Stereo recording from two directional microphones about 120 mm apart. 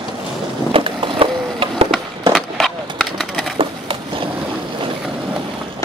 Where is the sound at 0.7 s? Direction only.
50° right (ahead or behind).